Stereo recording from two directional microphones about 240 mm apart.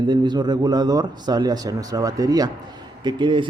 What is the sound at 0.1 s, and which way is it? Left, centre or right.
A man's voice, centre.